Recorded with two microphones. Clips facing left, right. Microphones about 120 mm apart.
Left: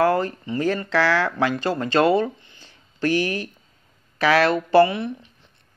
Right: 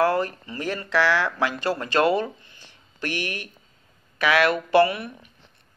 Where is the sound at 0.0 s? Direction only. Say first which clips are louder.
Left 2 dB; 30° left (ahead or behind).